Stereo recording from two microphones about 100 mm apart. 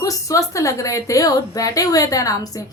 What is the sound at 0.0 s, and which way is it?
A woman's voice, 35° left (ahead or behind).